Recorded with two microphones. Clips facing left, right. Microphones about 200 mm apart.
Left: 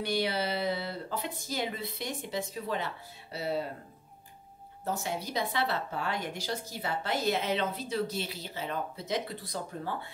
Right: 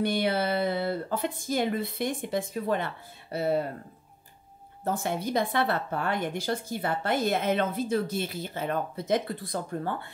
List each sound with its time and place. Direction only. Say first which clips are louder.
0.0 s a woman's voice: right 4 dB; 55° right (ahead or behind)
4.8 s a woman's voice: right 5 dB; 55° right (ahead or behind)